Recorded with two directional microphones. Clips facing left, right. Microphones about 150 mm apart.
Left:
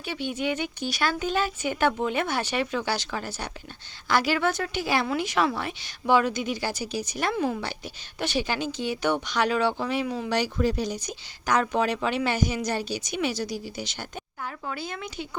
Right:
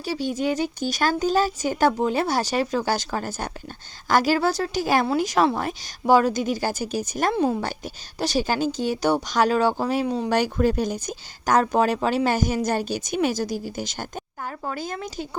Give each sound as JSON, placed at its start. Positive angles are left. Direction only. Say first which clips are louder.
{"t": 0.0, "sound": "speech", "louder": "right 4 dB", "side_deg": -40}
{"t": 10.3, "sound": "speech", "louder": "right 4 dB", "side_deg": -50}